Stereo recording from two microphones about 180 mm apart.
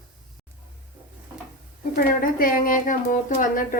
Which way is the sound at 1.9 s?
50° left (ahead or behind).